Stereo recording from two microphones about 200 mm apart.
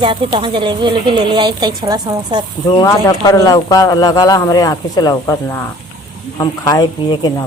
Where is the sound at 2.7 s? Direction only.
15° left (ahead or behind).